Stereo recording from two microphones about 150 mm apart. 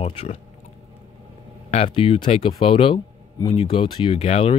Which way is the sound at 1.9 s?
35° left (ahead or behind).